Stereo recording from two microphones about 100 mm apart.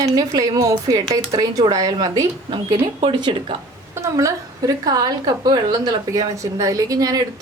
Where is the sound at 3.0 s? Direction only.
60° right (ahead or behind).